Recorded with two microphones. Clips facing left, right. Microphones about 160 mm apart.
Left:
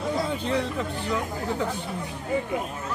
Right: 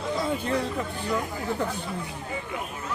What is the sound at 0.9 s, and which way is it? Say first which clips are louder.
Speech: left 1 dB; 15° right (ahead or behind).